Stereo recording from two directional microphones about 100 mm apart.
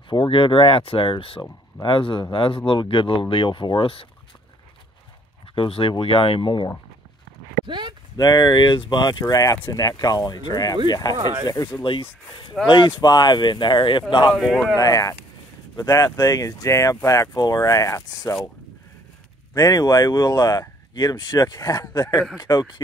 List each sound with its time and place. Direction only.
0.1 s speech: 55° left (ahead or behind)
5.5 s speech: 65° left (ahead or behind)
7.6 s speech: 55° right (ahead or behind)
8.2 s speech: 45° left (ahead or behind)
9.2 s speech: 35° left (ahead or behind)
11.8 s speech: 60° left (ahead or behind)
14.3 s speech: 5° right (ahead or behind)
14.8 s speech: 35° left (ahead or behind)
19.5 s speech: 40° left (ahead or behind)